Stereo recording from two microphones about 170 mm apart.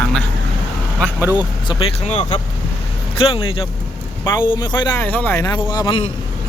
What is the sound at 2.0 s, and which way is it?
Speech, 40° left (ahead or behind).